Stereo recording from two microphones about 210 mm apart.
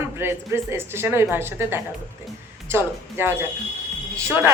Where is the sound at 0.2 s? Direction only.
10° right (ahead or behind).